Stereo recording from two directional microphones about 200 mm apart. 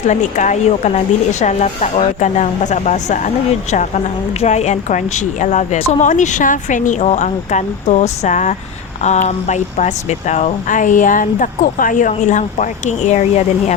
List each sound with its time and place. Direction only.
0.1 s a woman's voice: 35° left (ahead or behind)